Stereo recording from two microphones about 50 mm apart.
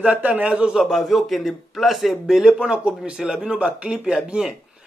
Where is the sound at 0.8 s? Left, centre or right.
Centre.